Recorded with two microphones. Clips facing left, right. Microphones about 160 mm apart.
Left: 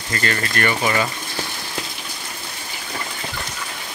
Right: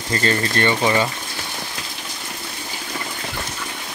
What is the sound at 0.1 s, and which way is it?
Speech, 25° right (ahead or behind).